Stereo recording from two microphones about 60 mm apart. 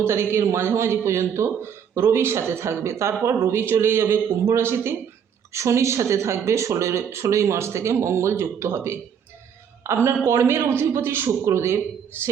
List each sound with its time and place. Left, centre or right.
0.0 s speech: right